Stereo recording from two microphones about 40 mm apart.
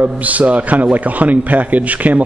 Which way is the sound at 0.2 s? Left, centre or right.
Right.